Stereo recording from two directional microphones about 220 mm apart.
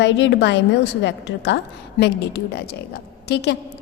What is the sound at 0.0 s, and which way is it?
Speech, 55° left (ahead or behind).